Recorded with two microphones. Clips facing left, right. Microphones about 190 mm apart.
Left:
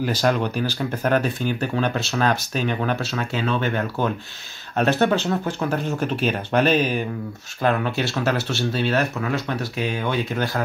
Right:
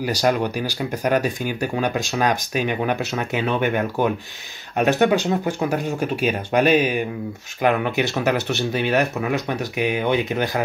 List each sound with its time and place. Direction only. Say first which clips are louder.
0.0 s speech: right 1 dB; 10° right (ahead or behind)